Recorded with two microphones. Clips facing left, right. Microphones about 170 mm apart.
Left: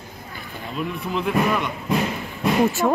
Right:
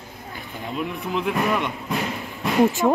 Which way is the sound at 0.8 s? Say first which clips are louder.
Left 1 dB; 15° right (ahead or behind).